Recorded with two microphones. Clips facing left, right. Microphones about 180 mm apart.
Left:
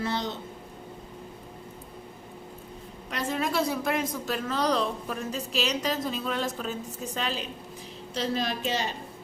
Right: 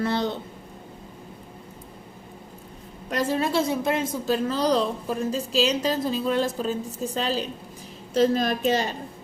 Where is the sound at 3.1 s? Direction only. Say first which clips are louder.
Right 5 dB; 40° right (ahead or behind).